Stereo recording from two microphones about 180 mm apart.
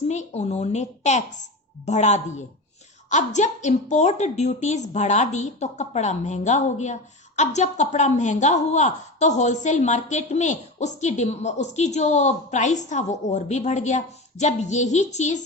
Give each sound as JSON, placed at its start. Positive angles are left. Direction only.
{"t": 0.1, "sound": "a woman's voice", "side_deg": 40}